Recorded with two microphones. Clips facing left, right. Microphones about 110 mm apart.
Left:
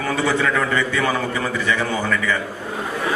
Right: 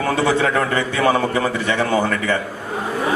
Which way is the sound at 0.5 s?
45° right (ahead or behind).